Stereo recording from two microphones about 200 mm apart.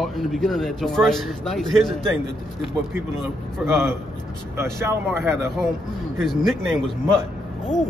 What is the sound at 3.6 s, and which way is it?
A man's voice, 10° right (ahead or behind).